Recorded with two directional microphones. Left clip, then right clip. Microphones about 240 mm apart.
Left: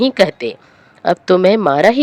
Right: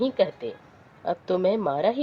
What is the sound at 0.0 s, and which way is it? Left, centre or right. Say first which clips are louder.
Speech: left 11 dB; left.